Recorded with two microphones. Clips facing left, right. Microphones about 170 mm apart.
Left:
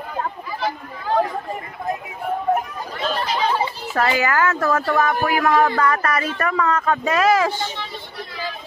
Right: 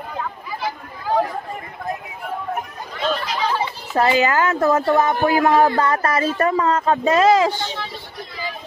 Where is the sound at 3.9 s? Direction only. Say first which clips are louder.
Right 3 dB; 20° right (ahead or behind).